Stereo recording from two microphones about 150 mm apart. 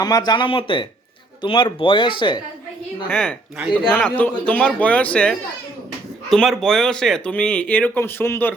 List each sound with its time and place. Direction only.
0.0 s speech: 25° left (ahead or behind)
3.1 s speech: 5° left (ahead or behind)